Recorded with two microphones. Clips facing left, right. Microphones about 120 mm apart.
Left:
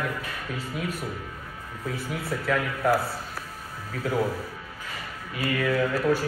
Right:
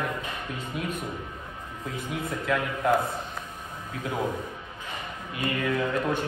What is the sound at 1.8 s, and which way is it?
A man's voice, 20° right (ahead or behind).